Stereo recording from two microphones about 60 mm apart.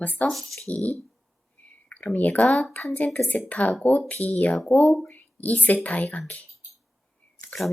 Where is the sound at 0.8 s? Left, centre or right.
Right.